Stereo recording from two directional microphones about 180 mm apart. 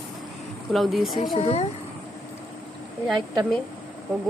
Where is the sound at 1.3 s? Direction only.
35° left (ahead or behind).